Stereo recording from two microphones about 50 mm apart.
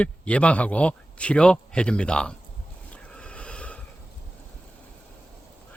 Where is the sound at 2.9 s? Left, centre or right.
Left.